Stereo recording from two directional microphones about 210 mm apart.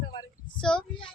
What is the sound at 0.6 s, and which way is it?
Child singing, 5° left (ahead or behind).